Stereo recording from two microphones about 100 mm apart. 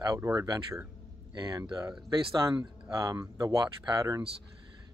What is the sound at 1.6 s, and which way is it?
Speech, 40° right (ahead or behind).